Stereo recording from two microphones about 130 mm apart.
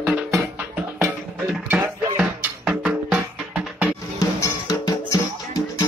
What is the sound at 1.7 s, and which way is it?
Music, 10° right (ahead or behind).